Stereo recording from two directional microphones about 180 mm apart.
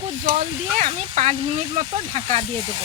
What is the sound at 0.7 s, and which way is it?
Speech, 40° right (ahead or behind).